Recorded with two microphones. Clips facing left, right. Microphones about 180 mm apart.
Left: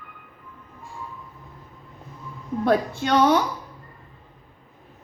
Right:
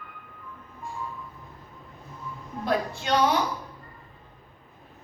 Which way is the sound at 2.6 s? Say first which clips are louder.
Left 6 dB; 55° left (ahead or behind).